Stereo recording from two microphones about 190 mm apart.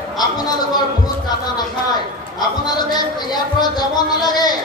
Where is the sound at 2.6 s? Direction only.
20° left (ahead or behind).